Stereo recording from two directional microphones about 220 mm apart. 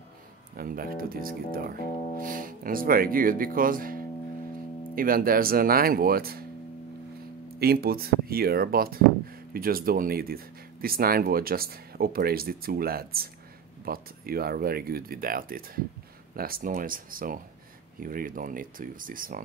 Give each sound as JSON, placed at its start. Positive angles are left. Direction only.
{"t": 0.6, "sound": "speech", "side_deg": -40}
{"t": 7.5, "sound": "speech", "side_deg": -45}